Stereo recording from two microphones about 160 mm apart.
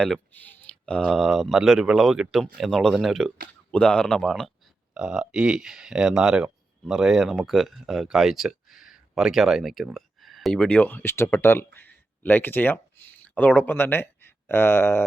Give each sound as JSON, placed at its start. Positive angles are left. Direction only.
{"t": 0.0, "sound": "speech", "side_deg": 5}